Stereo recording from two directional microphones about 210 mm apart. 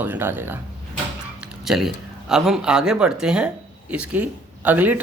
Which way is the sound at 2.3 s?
5° right (ahead or behind).